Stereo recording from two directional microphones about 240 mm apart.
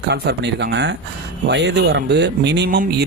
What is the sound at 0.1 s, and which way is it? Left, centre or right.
Speech, right.